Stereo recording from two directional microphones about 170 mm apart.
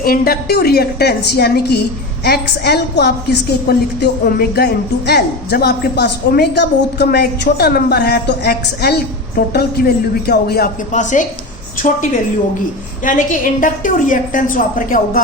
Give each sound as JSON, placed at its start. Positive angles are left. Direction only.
{"t": 0.0, "sound": "a woman's voice", "side_deg": 60}
{"t": 10.9, "sound": "a woman's voice", "side_deg": 45}